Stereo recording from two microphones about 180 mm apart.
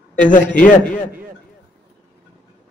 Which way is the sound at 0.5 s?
5° left (ahead or behind).